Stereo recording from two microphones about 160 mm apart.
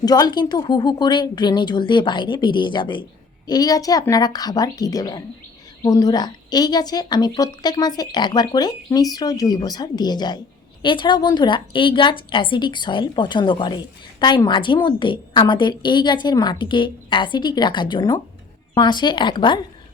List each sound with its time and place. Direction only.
0.0 s a woman's voice: 25° left (ahead or behind)